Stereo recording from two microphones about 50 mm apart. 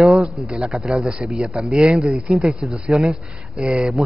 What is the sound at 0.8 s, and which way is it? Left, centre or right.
A man's voice, centre.